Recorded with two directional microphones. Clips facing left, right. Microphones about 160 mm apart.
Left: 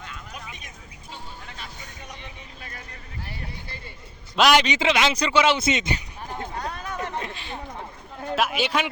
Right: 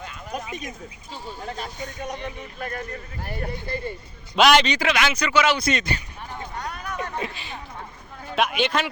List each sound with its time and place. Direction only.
0.3 s speech: 45° right (ahead or behind)
4.4 s speech: centre (ahead or behind)
4.6 s speech: 20° left (ahead or behind)
6.6 s a sound: 30° left (ahead or behind)
7.2 s a man's voice: centre (ahead or behind)